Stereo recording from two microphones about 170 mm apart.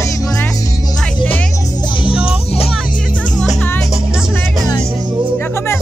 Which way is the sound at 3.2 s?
5° left (ahead or behind).